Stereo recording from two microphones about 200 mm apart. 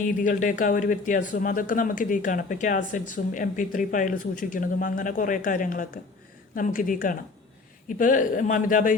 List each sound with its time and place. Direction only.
0.1 s speech: 40° left (ahead or behind)